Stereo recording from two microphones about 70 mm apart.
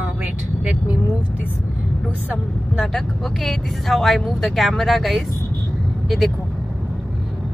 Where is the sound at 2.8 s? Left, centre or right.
Centre.